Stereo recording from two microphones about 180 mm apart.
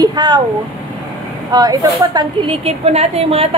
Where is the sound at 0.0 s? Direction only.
20° right (ahead or behind).